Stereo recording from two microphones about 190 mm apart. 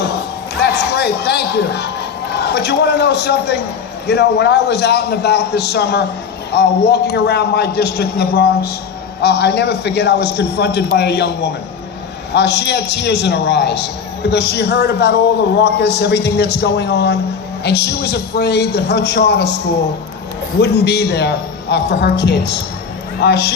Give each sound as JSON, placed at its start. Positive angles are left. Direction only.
{"t": 0.6, "sound": "a man's voice", "side_deg": 60}